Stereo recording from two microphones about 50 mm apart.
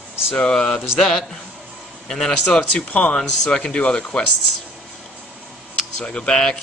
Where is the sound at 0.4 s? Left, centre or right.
Centre.